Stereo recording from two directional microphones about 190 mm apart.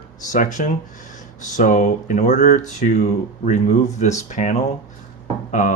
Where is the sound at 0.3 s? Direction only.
40° left (ahead or behind).